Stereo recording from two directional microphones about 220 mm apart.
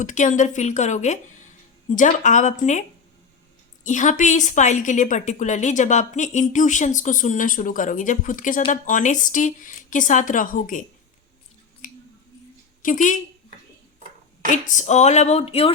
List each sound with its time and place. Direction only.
0.0 s a woman's voice: 35° left (ahead or behind)
3.8 s a woman's voice: 35° left (ahead or behind)
12.8 s a woman's voice: 35° left (ahead or behind)
14.4 s a woman's voice: 35° left (ahead or behind)